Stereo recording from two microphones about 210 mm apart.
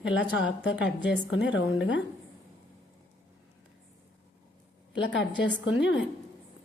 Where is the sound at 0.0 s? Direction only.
60° left (ahead or behind).